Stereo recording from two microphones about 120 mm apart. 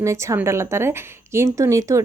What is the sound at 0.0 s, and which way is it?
Speech, 25° right (ahead or behind).